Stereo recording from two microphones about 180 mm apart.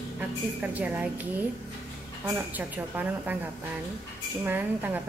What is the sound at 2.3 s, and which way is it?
A woman's voice, 10° right (ahead or behind).